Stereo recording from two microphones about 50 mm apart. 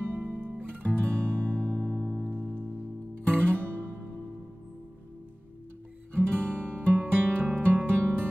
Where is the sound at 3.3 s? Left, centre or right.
Right.